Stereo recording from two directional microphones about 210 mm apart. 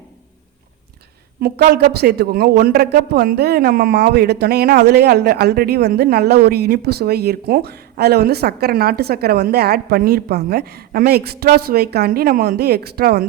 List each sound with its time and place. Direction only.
1.4 s speech: 50° right (ahead or behind)